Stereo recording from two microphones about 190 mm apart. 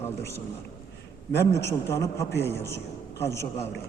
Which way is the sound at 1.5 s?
15° left (ahead or behind).